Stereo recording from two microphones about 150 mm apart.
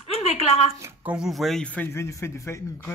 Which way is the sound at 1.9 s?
15° left (ahead or behind).